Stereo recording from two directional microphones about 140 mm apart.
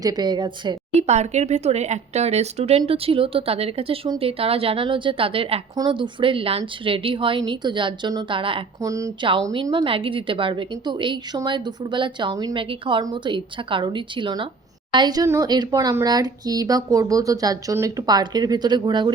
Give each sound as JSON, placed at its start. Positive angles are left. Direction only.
{"t": 0.0, "sound": "a woman's voice", "side_deg": -30}
{"t": 0.9, "sound": "speech", "side_deg": -50}
{"t": 5.7, "sound": "a woman's voice", "side_deg": -30}
{"t": 8.8, "sound": "speech", "side_deg": -25}
{"t": 9.5, "sound": "a woman's voice", "side_deg": -35}